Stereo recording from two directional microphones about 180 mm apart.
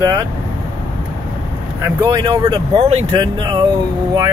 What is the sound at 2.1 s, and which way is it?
Speech, 25° right (ahead or behind).